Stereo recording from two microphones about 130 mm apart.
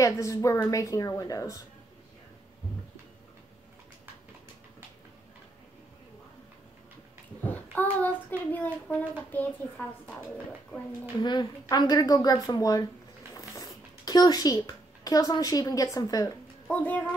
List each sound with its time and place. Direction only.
0.0 s a child's voice: 25° left (ahead or behind)
7.4 s a child's voice: 15° left (ahead or behind)
11.7 s a child's voice: 30° left (ahead or behind)
13.3 s a sound: 25° left (ahead or behind)
14.0 s a child's voice: 30° left (ahead or behind)
16.6 s a child's voice: 10° left (ahead or behind)